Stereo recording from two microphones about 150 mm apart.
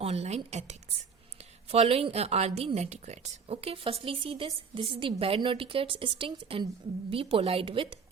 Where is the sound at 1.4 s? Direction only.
45° right (ahead or behind).